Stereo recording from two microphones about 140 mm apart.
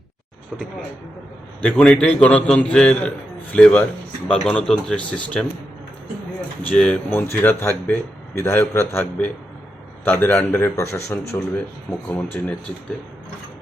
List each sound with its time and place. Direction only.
1.7 s a man's voice: 5° left (ahead or behind)
6.6 s a man's voice: 10° left (ahead or behind)